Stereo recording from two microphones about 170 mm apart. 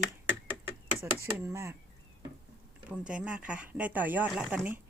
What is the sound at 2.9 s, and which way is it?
Speech, 5° right (ahead or behind).